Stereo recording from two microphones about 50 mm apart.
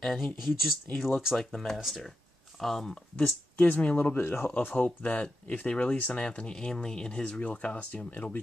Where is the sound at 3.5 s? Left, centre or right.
Left.